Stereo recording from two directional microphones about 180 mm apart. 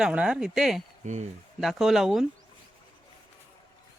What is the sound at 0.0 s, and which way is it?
Speech, 5° right (ahead or behind).